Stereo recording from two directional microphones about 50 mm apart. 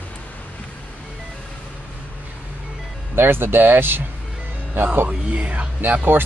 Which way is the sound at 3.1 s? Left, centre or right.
Right.